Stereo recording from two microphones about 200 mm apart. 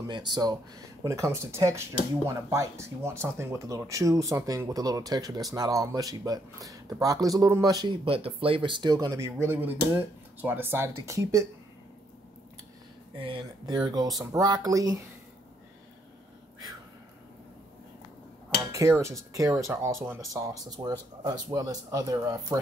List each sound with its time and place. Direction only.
0.1 s speech: 20° right (ahead or behind)
13.2 s speech: 25° right (ahead or behind)
18.7 s speech: 15° right (ahead or behind)